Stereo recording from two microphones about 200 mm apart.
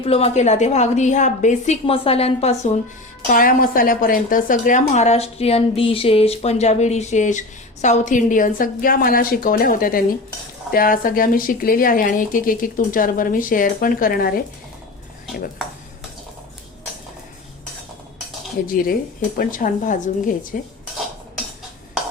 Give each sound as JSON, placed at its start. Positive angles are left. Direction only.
{"t": 0.0, "sound": "a woman's voice", "side_deg": 30}
{"t": 3.2, "sound": "a woman's voice", "side_deg": 45}
{"t": 18.7, "sound": "speech", "side_deg": 45}